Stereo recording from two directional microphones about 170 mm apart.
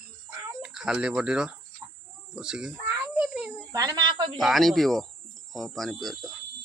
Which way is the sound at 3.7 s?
20° right (ahead or behind).